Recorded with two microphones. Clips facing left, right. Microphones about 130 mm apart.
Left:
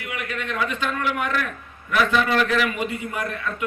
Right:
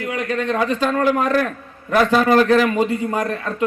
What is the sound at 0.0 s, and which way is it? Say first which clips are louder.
A man's voice: right 8 dB; 35° right (ahead or behind).